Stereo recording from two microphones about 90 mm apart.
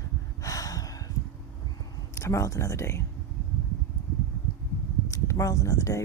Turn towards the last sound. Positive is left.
turn(degrees=35)  # may be behind; listen again after turning